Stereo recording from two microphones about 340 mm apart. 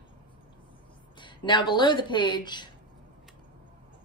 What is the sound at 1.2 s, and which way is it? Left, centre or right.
A woman's voice, centre.